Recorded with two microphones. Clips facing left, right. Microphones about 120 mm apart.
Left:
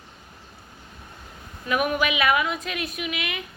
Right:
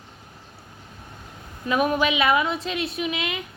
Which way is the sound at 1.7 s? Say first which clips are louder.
Right 2 dB; 30° right (ahead or behind).